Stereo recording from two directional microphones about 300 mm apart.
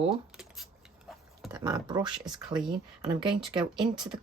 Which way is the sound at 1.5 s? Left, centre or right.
Centre.